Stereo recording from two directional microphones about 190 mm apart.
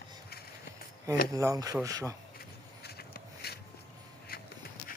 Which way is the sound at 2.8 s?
55° left (ahead or behind).